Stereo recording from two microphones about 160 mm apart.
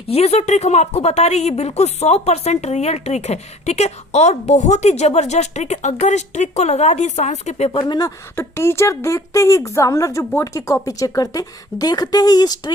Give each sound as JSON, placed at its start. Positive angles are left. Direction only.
{"t": 0.1, "sound": "a woman's voice", "side_deg": 40}